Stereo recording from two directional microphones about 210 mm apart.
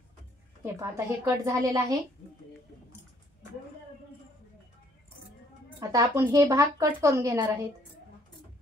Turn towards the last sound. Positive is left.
turn(degrees=-15)  # may be behind; listen again after turning